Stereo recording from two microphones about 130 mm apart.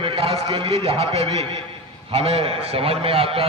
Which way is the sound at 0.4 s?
45° right (ahead or behind).